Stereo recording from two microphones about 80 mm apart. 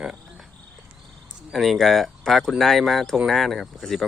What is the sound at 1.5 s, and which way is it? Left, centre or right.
Speech, centre.